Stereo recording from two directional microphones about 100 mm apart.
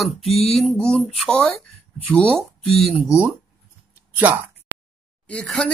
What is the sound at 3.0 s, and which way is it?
Speech, 10° right (ahead or behind).